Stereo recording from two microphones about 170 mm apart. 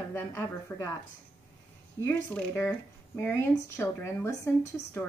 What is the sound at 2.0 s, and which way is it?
Speech, 15° left (ahead or behind).